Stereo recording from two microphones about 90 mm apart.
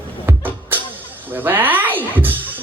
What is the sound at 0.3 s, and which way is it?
Music, 20° right (ahead or behind).